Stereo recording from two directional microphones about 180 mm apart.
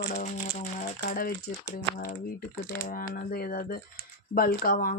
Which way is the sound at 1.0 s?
55° left (ahead or behind).